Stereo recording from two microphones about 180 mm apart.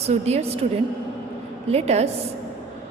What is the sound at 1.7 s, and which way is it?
Speech, 35° right (ahead or behind).